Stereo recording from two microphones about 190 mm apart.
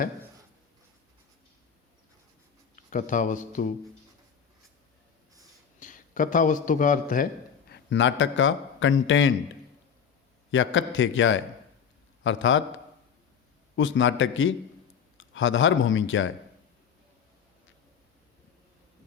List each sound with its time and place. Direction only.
2.7 s speech: 45° left (ahead or behind)
5.8 s a man's voice: 45° left (ahead or behind)
7.7 s a man's voice: 70° left (ahead or behind); by 9.3 s 90° left
10.5 s a man's voice: 90° left
13.7 s a man's voice: 90° left